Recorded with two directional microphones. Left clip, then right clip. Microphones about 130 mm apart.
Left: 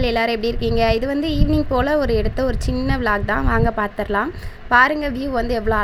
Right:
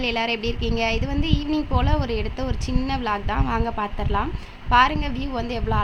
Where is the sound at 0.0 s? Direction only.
45° left (ahead or behind).